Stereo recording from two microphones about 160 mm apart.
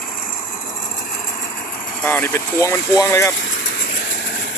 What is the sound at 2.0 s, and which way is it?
Speech, 15° left (ahead or behind).